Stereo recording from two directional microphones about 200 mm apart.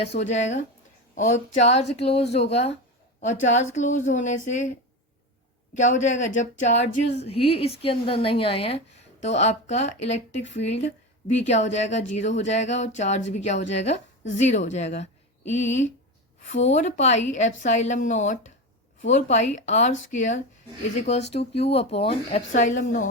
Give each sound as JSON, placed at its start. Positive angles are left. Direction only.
{"t": 0.1, "sound": "speech", "side_deg": 35}
{"t": 5.7, "sound": "speech", "side_deg": 35}